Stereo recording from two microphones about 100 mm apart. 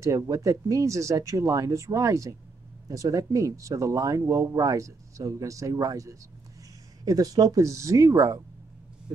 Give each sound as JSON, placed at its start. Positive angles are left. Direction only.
{"t": 0.0, "sound": "speech", "side_deg": -30}